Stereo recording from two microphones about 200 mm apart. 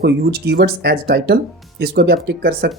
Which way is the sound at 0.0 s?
55° right (ahead or behind).